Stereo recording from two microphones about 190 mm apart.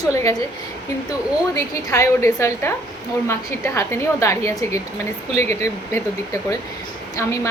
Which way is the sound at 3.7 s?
15° left (ahead or behind).